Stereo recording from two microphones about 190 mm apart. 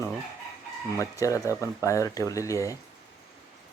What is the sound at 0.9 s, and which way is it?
Speech, 15° left (ahead or behind).